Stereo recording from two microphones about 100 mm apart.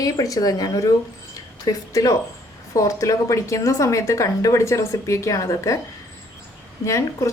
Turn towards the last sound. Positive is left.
turn(degrees=30)  # may be behind; listen again after turning